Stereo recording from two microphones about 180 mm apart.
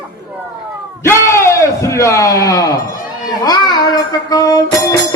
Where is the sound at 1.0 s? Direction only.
15° left (ahead or behind).